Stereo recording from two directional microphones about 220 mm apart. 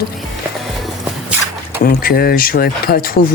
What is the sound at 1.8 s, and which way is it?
Speech, 40° left (ahead or behind).